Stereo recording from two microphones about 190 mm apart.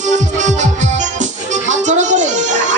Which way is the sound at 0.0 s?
40° right (ahead or behind).